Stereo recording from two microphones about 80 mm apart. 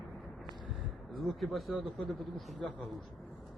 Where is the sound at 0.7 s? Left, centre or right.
Centre.